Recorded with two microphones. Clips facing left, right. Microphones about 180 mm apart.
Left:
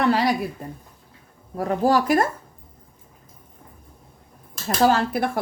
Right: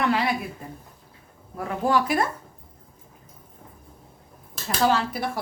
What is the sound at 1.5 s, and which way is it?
Speech, 40° left (ahead or behind).